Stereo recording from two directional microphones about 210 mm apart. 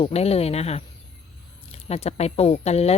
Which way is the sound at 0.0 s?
30° left (ahead or behind).